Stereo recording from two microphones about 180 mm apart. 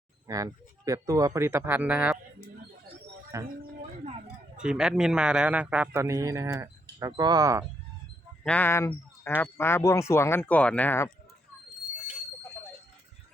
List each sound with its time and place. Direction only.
0.3 s a man's voice: 20° right (ahead or behind)
3.6 s a sound: 40° right (ahead or behind)
4.5 s a man's voice: 5° right (ahead or behind)
8.4 s speech: 10° left (ahead or behind)